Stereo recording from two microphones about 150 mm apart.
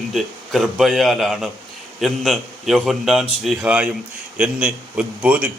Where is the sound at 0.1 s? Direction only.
Centre (ahead or behind).